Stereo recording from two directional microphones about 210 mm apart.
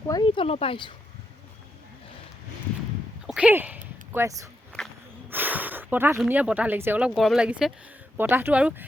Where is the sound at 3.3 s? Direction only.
5° right (ahead or behind).